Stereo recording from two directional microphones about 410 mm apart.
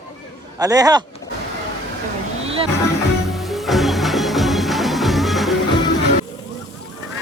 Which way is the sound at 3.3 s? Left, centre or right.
Centre.